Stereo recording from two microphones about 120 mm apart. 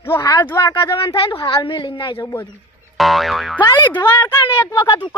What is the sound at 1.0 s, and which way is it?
Speech, 45° left (ahead or behind).